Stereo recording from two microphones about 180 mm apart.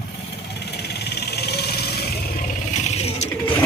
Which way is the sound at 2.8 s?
35° left (ahead or behind).